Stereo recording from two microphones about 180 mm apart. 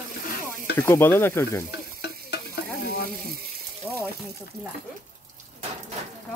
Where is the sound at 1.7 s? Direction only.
65° left (ahead or behind).